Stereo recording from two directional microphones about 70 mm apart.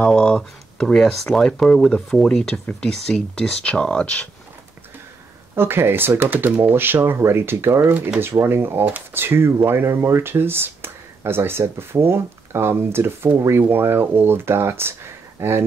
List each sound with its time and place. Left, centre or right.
0.0 s speech: centre
5.5 s speech: right